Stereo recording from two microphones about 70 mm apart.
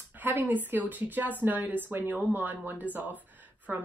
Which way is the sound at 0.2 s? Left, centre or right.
Right.